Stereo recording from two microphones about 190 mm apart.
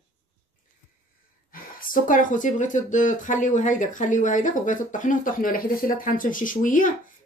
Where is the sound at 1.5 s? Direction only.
45° left (ahead or behind).